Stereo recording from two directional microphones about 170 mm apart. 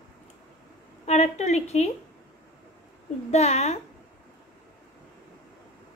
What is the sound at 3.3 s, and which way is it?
Speech, 40° left (ahead or behind).